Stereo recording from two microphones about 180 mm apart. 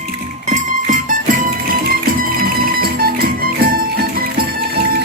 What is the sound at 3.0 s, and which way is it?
Music, 55° right (ahead or behind).